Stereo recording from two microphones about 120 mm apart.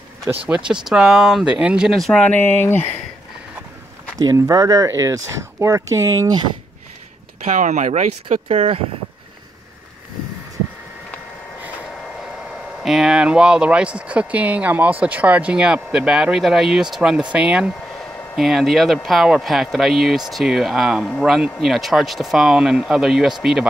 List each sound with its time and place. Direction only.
0.5 s speech: 5° right (ahead or behind); by 2.9 s 20° left (ahead or behind)
4.2 s speech: 30° right (ahead or behind)
7.4 s speech: 90° right
8.5 s speech: 55° right (ahead or behind)
12.4 s speech: 5° right (ahead or behind)
17.9 s a sound: centre (ahead or behind)
18.9 s speech: centre (ahead or behind)